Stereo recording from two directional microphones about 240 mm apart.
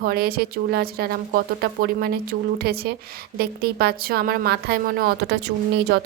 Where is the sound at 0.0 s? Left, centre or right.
Right.